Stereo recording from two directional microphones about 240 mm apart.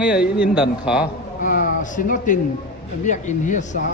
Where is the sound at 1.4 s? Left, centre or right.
Left.